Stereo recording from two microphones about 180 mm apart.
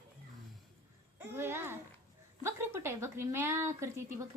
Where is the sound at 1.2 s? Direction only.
10° right (ahead or behind).